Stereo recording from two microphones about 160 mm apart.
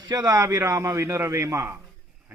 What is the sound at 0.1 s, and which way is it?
Speech, 20° right (ahead or behind).